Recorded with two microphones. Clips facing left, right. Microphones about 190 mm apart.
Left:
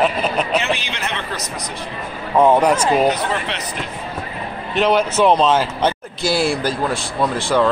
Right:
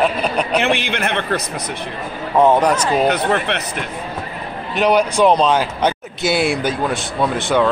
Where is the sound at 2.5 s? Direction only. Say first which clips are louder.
Even; 10° left (ahead or behind).